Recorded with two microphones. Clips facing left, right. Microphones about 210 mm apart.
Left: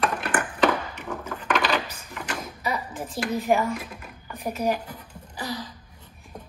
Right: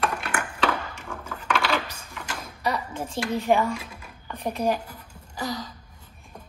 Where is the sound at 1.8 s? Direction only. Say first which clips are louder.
Left 1 dB; 10° left (ahead or behind).